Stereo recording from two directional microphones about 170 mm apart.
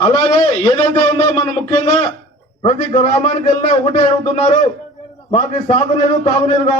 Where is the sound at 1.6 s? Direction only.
40° left (ahead or behind).